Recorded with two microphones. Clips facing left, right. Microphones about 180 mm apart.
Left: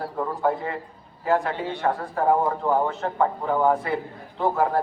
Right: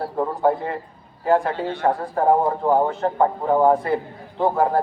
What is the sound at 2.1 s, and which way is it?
A man's voice, 35° right (ahead or behind).